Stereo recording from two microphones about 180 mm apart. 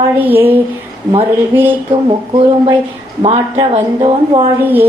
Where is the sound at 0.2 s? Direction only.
10° right (ahead or behind).